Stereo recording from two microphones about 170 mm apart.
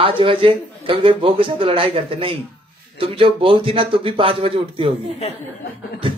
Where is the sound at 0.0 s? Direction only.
30° right (ahead or behind).